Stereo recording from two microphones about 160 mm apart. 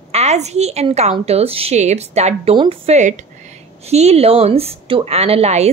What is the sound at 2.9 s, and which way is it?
A woman's voice, 50° right (ahead or behind).